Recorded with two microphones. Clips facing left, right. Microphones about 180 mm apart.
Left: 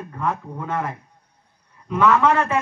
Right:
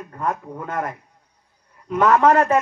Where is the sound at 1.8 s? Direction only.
45° right (ahead or behind).